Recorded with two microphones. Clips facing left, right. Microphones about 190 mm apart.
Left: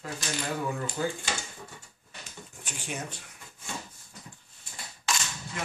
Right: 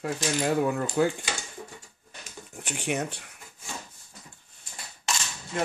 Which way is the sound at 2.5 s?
65° right (ahead or behind).